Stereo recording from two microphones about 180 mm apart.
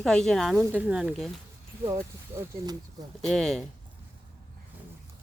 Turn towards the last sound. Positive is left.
turn(degrees=0)  # may be behind; listen again after turning